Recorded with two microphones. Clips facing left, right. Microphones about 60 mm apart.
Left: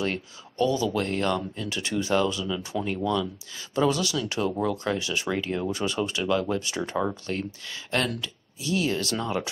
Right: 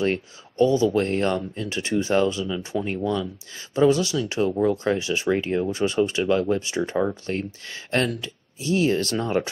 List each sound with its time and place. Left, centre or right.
0.0 s speech: right